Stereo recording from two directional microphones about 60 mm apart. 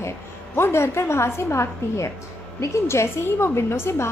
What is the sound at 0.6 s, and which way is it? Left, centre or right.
A woman's voice, left.